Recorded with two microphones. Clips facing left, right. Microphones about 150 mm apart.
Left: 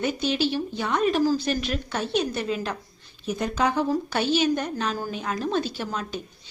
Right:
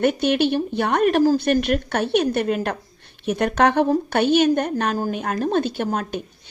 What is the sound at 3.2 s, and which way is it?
A woman's voice, 70° right (ahead or behind).